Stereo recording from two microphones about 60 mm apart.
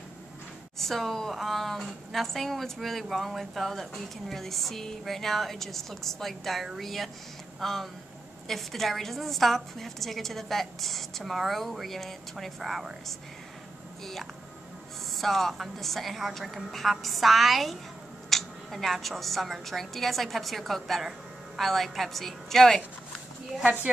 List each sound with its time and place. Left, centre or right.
0.7 s a woman's voice: centre
15.1 s a woman's voice: centre
23.6 s speech: right